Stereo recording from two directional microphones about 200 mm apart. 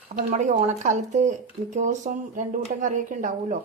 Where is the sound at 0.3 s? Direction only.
35° right (ahead or behind).